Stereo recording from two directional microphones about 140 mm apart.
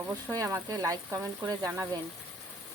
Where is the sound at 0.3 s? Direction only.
20° right (ahead or behind).